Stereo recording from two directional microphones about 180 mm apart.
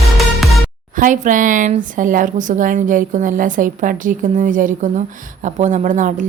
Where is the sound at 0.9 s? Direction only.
45° right (ahead or behind).